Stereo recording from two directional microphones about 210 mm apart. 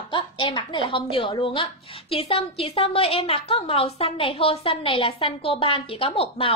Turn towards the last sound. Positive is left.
turn(degrees=25)  # may be behind; listen again after turning